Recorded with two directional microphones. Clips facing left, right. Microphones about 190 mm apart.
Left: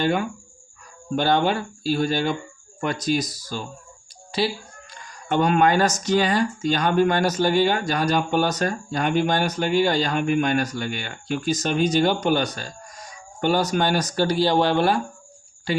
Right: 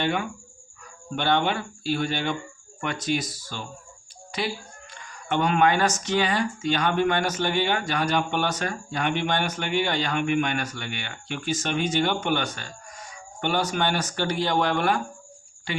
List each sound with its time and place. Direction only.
0.0 s speech: 40° left (ahead or behind)